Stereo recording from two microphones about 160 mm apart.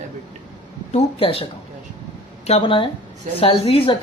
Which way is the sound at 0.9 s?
40° left (ahead or behind).